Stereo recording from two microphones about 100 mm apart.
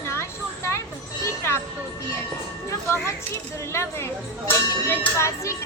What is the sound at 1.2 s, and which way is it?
Music, 30° left (ahead or behind).